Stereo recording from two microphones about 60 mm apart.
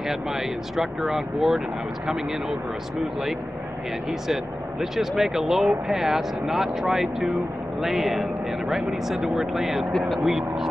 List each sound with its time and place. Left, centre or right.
0.1 s speech: centre
4.3 s speech: centre
9.9 s speech: centre
10.2 s speech: centre